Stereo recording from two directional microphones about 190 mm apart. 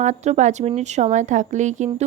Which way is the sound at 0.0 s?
40° right (ahead or behind).